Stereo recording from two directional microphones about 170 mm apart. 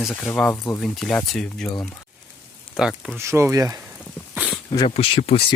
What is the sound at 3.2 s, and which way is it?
Speech, 15° right (ahead or behind).